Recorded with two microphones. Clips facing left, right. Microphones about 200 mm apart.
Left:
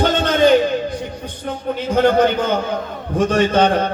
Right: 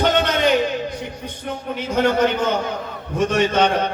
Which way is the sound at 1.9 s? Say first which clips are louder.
Left 3 dB; 30° left (ahead or behind).